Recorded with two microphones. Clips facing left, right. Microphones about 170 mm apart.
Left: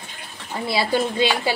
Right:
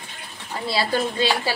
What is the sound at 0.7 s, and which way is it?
Speech, 15° left (ahead or behind).